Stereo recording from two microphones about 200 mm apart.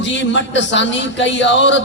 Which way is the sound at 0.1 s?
65° left (ahead or behind).